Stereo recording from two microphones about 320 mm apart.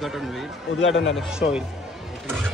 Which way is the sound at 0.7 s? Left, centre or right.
Left.